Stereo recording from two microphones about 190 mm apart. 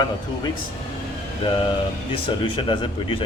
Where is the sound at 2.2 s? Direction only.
25° left (ahead or behind).